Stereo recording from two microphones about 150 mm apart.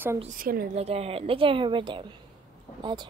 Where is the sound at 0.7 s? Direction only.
40° right (ahead or behind).